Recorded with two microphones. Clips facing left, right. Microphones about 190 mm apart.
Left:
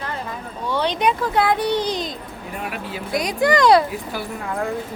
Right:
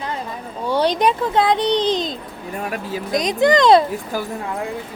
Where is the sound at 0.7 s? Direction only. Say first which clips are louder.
Right 3 dB; 40° right (ahead or behind).